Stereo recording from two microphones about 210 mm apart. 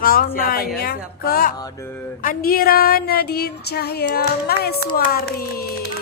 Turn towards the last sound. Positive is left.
turn(degrees=45)  # may be behind; listen again after turning